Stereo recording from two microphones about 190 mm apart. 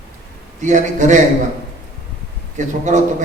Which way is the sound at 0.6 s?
40° right (ahead or behind).